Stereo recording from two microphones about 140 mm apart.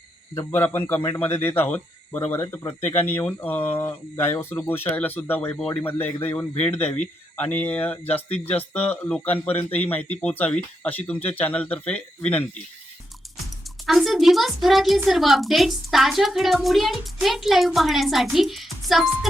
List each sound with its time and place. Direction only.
0.5 s speech: 15° left (ahead or behind)
2.8 s speech: 45° left (ahead or behind)
3.2 s speech: 15° left (ahead or behind)
9.5 s speech: 45° left (ahead or behind)
9.9 s speech: 10° left (ahead or behind)
13.8 s a woman's voice: centre (ahead or behind)